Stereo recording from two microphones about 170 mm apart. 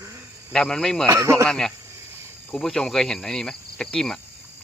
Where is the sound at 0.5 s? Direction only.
5° left (ahead or behind).